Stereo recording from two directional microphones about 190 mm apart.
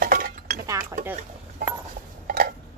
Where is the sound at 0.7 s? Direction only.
15° right (ahead or behind).